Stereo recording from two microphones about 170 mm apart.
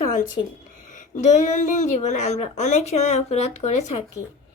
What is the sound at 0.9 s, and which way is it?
Speech, 50° left (ahead or behind).